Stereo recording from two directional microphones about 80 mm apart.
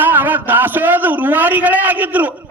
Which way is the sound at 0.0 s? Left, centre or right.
Right.